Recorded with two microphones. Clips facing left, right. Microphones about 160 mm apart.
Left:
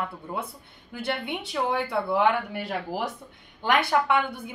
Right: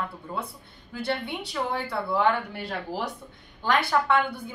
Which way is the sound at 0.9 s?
15° left (ahead or behind).